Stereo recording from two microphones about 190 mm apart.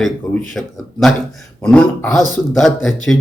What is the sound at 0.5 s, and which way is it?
A man's voice, centre (ahead or behind).